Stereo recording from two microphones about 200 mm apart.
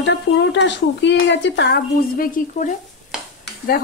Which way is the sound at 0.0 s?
60° left (ahead or behind).